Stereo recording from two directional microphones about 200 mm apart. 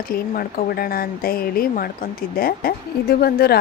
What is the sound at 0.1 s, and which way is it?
Speech, 45° left (ahead or behind).